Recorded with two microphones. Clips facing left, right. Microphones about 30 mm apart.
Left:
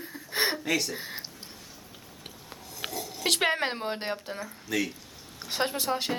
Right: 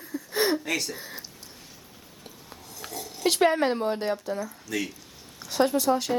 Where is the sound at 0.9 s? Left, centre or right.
Left.